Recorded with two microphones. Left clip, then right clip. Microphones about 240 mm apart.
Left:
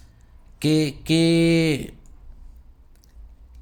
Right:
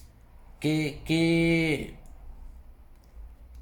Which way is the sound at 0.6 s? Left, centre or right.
Left.